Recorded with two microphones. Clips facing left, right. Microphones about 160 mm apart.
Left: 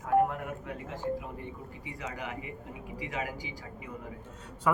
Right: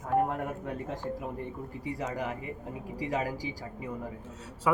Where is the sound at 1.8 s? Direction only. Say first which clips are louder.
Right 6 dB; 40° right (ahead or behind).